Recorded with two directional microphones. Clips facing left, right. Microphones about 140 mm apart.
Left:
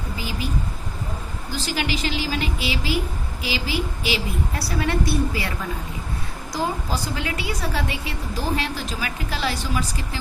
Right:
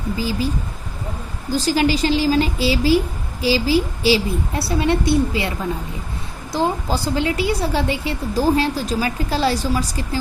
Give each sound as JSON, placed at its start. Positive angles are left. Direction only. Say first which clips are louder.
{"t": 0.2, "sound": "a woman's voice", "louder": "right 4 dB", "side_deg": -35}
{"t": 6.5, "sound": "a woman's voice", "louder": "right 5 dB", "side_deg": -30}